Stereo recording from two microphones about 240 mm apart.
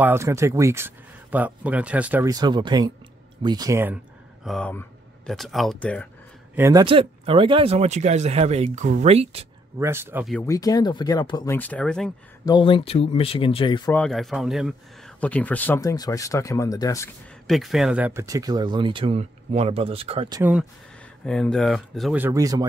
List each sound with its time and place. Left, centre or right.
0.0 s speech: centre
4.5 s speech: centre
6.5 s speech: centre
9.8 s speech: centre
10.2 s speech: centre
12.4 s speech: centre
13.9 s speech: centre
17.5 s speech: centre
21.3 s speech: centre